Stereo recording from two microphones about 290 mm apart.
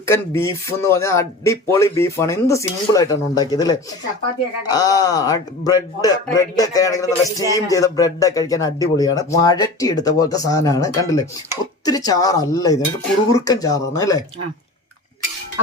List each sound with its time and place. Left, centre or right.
0.0 s speech: centre